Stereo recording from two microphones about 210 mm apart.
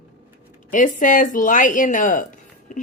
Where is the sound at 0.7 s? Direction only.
40° left (ahead or behind).